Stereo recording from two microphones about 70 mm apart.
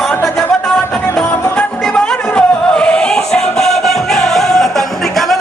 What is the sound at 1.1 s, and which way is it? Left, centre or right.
Music, centre.